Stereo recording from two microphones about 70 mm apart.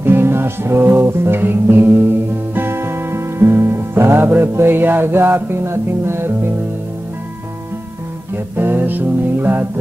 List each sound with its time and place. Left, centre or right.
0.0 s music: right
8.5 s music: right